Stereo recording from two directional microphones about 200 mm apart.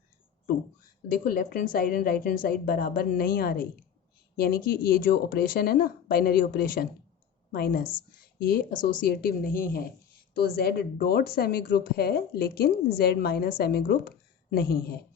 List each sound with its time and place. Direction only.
1.0 s speech: 45° left (ahead or behind)